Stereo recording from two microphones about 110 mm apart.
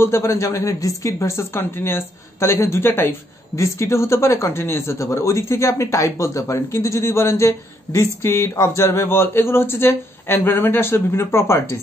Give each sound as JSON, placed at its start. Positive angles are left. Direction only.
{"t": 0.0, "sound": "speech", "side_deg": 25}